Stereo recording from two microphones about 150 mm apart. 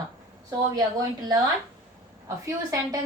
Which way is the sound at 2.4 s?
20° right (ahead or behind).